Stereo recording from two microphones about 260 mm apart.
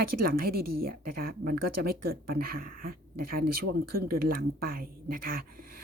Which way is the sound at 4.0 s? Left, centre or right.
Right.